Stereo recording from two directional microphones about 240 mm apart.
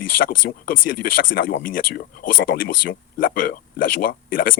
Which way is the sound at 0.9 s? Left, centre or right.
Left.